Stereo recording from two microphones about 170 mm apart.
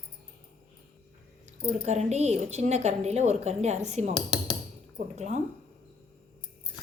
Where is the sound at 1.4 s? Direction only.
40° right (ahead or behind).